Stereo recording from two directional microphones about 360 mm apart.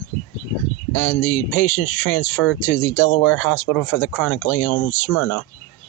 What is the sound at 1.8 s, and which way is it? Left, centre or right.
Speech, left.